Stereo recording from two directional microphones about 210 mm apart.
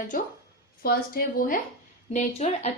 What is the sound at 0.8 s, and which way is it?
Speech, 45° left (ahead or behind).